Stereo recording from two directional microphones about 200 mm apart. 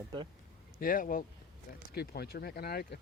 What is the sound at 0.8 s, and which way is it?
Speech, 45° left (ahead or behind).